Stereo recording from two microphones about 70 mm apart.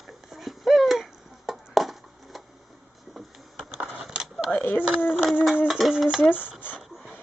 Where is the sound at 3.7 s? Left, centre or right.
Centre.